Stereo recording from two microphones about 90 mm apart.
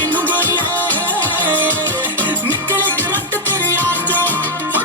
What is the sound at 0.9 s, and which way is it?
Music, 20° right (ahead or behind).